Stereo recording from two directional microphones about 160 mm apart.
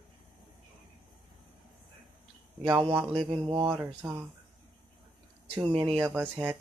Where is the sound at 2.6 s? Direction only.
30° right (ahead or behind).